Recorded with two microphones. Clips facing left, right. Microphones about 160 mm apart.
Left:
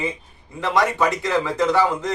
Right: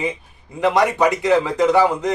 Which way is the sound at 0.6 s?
15° right (ahead or behind).